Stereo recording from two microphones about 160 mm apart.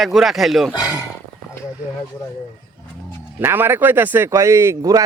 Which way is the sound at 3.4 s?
15° right (ahead or behind).